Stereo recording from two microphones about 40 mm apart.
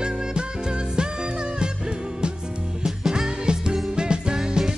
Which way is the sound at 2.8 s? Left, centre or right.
Centre.